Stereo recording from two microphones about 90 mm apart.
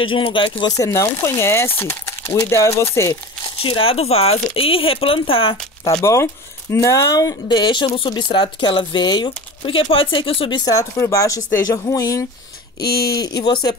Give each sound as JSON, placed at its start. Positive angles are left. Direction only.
{"t": 0.1, "sound": "speech", "side_deg": 70}
{"t": 0.7, "sound": "speech", "side_deg": 35}
{"t": 3.5, "sound": "speech", "side_deg": 85}
{"t": 6.0, "sound": "speech", "side_deg": 30}
{"t": 7.4, "sound": "speech", "side_deg": 65}
{"t": 8.1, "sound": "speech", "side_deg": 60}
{"t": 9.7, "sound": "speech", "side_deg": 85}
{"t": 10.6, "sound": "speech", "side_deg": 35}